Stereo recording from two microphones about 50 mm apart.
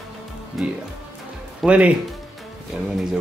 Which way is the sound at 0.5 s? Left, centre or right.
Centre.